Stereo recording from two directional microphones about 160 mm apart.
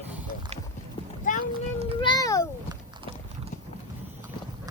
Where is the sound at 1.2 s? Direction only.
55° left (ahead or behind).